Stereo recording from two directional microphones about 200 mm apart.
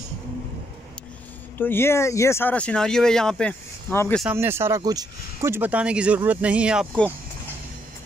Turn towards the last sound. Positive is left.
turn(degrees=-5)  # may be behind; listen again after turning